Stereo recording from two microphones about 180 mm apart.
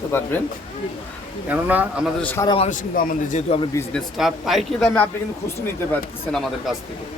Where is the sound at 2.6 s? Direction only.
50° left (ahead or behind).